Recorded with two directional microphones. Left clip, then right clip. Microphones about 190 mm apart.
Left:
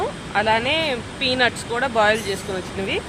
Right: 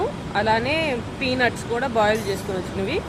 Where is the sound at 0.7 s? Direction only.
65° left (ahead or behind).